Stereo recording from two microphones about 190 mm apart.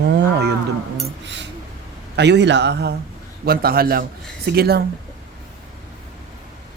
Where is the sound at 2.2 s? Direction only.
65° right (ahead or behind).